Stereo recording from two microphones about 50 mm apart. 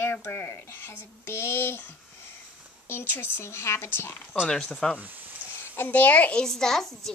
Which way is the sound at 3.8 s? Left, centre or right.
Left.